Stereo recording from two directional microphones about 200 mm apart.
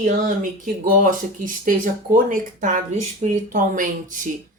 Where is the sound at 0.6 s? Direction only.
40° right (ahead or behind).